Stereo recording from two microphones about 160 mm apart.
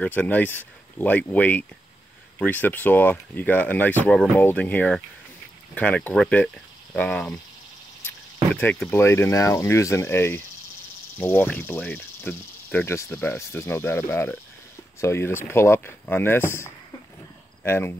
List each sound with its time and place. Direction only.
0.0 s speech: 10° left (ahead or behind)
8.5 s speech: 10° left (ahead or behind)